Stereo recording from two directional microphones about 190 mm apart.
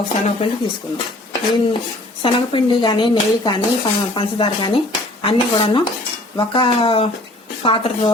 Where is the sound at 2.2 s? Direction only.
25° left (ahead or behind).